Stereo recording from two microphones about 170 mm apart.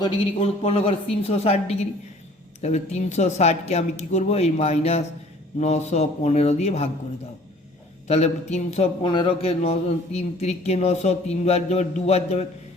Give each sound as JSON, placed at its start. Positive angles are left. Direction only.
{"t": 0.0, "sound": "a man's voice", "side_deg": 35}
{"t": 8.0, "sound": "a man's voice", "side_deg": 40}